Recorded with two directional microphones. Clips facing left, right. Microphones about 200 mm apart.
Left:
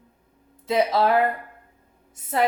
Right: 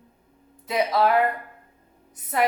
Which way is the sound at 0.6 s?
25° left (ahead or behind).